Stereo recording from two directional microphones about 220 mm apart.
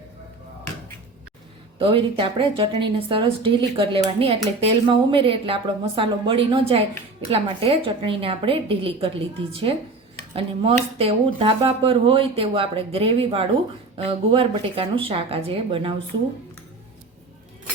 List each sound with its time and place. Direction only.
1.8 s speech: 25° right (ahead or behind)